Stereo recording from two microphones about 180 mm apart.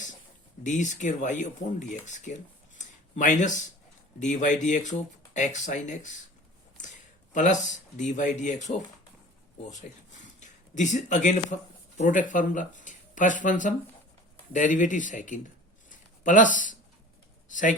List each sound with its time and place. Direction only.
0.6 s speech: 45° left (ahead or behind)
7.3 s speech: 45° left (ahead or behind)
15.9 s a sound: 45° left (ahead or behind)
17.5 s speech: 45° left (ahead or behind)